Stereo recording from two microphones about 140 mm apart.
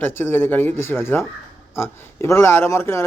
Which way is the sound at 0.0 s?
15° left (ahead or behind).